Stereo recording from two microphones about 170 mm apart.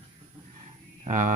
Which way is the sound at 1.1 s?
50° right (ahead or behind).